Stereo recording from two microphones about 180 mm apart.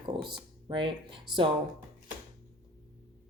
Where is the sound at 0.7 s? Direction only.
25° right (ahead or behind).